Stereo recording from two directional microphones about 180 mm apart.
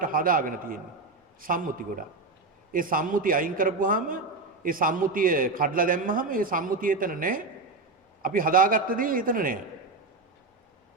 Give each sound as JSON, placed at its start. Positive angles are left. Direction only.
{"t": 0.0, "sound": "a man's voice", "side_deg": -50}